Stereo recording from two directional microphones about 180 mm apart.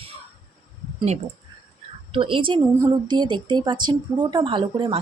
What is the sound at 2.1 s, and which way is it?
Speech, 30° right (ahead or behind).